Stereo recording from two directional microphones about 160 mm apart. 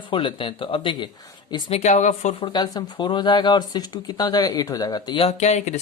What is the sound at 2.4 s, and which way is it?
Speech, 25° left (ahead or behind).